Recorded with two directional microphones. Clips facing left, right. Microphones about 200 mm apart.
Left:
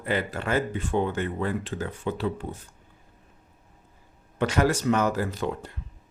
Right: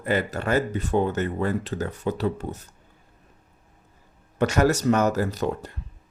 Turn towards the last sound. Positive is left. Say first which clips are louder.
# right 3 dB
turn(degrees=-40)  # may be behind; listen again after turning